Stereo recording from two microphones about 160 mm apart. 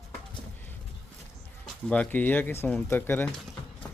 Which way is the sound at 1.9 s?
10° left (ahead or behind).